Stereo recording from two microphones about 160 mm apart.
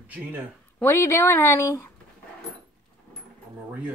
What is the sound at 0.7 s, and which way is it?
Speech, 15° left (ahead or behind).